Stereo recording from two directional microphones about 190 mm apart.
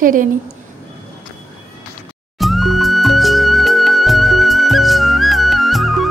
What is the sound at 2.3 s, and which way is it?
Music, centre (ahead or behind).